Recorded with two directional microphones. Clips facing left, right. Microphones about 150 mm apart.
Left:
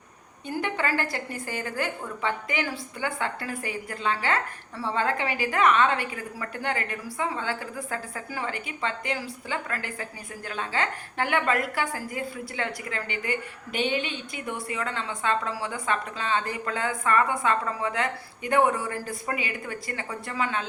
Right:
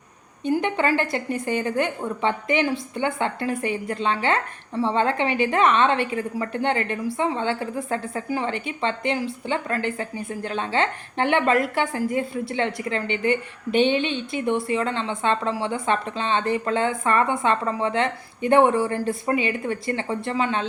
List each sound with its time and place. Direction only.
0.4 s a woman's voice: 20° right (ahead or behind)